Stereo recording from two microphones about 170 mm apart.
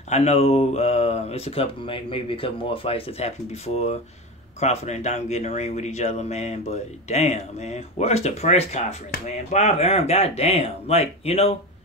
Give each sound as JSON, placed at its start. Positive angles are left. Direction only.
{"t": 0.1, "sound": "speech", "side_deg": 40}